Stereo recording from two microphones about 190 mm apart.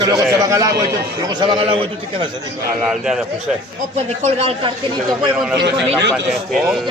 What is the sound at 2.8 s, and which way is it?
Speech, 5° right (ahead or behind).